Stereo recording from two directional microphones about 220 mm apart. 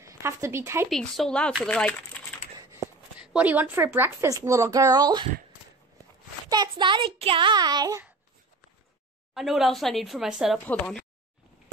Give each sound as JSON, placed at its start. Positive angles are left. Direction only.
{"t": 0.0, "sound": "speech", "side_deg": -15}
{"t": 0.8, "sound": "speech", "side_deg": 0}
{"t": 2.6, "sound": "a woman's voice", "side_deg": -10}
{"t": 6.5, "sound": "a child's voice", "side_deg": -20}
{"t": 9.3, "sound": "speech", "side_deg": 0}